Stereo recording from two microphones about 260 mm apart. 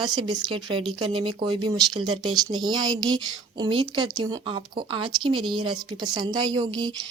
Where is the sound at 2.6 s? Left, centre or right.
Centre.